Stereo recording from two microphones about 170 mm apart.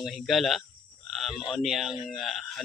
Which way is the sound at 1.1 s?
Centre (ahead or behind).